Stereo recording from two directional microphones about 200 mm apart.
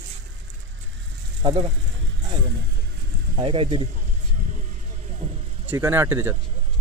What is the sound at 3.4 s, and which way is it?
Speech, 25° right (ahead or behind).